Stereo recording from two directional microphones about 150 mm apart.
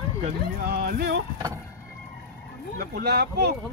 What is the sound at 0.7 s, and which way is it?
Speech, 90° right.